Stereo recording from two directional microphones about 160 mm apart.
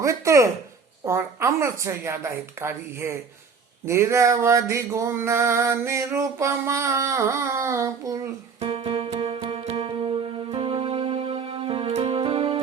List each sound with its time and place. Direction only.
0.0 s speech: 20° right (ahead or behind)
1.0 s a sound: 20° right (ahead or behind)
8.5 s music: 35° right (ahead or behind)